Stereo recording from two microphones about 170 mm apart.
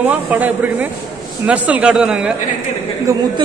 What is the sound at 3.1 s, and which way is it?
Speech, 20° right (ahead or behind).